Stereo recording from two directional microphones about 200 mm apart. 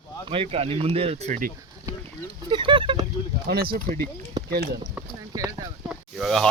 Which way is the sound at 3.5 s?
50° right (ahead or behind).